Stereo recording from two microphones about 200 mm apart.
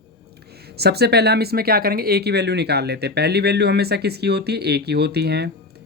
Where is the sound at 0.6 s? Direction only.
55° right (ahead or behind).